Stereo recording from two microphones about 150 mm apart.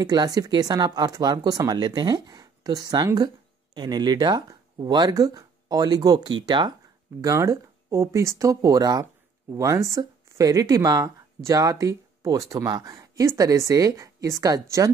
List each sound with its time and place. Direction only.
0.0 s speech: 25° right (ahead or behind)